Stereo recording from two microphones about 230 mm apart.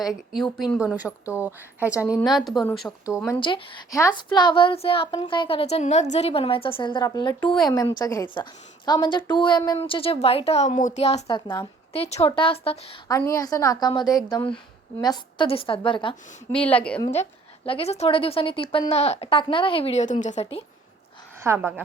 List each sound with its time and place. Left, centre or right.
0.6 s a woman's voice: centre
3.4 s speech: centre
7.4 s a woman's voice: centre
7.7 s a woman's voice: centre
16.5 s a woman's voice: centre
17.7 s speech: left
21.4 s a woman's voice: centre